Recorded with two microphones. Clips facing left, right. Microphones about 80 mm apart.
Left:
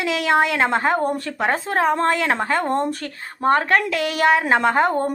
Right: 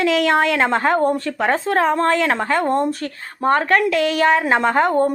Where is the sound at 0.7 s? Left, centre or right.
Left.